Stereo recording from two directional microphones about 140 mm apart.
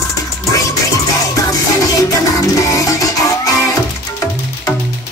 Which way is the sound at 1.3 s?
25° left (ahead or behind).